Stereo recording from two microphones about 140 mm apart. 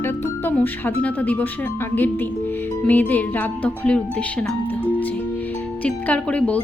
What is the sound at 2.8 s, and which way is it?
Music, 10° left (ahead or behind).